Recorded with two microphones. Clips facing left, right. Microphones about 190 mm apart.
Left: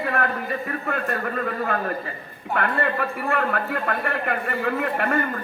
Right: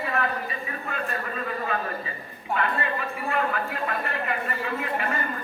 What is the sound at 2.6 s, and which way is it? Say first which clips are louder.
A man's voice: left 5 dB; 60° left (ahead or behind).